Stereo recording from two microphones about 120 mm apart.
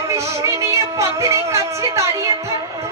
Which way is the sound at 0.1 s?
25° right (ahead or behind).